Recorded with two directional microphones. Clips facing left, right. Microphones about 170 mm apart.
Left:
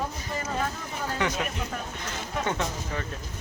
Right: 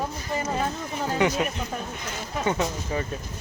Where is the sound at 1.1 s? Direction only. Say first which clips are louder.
Right 6 dB; 15° right (ahead or behind).